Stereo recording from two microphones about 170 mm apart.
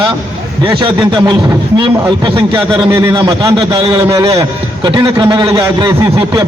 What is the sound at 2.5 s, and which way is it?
A man's voice, 15° right (ahead or behind).